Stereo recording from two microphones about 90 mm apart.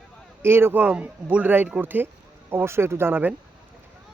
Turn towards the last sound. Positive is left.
turn(degrees=-25)  # may be behind; listen again after turning